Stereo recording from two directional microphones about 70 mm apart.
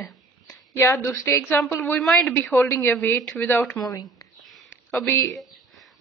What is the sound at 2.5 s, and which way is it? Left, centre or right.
Speech, left.